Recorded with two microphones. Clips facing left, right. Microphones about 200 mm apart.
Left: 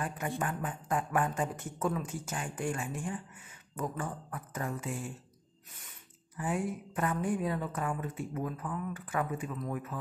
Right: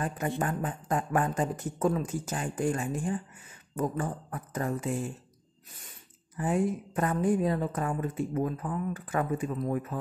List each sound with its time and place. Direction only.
0.0 s speech: 40° right (ahead or behind)
6.3 s speech: 40° right (ahead or behind)